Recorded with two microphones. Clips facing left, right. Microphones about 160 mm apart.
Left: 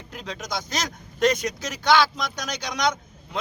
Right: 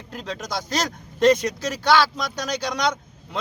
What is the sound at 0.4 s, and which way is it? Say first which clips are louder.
Speech: right 3 dB; 35° right (ahead or behind).